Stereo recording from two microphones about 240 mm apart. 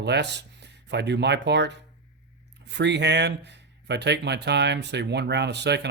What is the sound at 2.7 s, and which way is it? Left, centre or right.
Speech, right.